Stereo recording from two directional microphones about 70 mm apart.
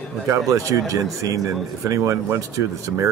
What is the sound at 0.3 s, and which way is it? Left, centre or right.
Speech, right.